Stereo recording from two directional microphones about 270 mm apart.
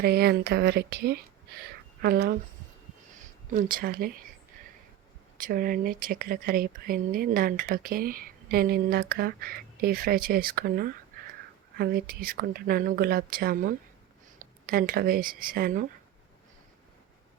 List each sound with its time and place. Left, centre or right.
0.0 s a woman's voice: right
5.4 s speech: right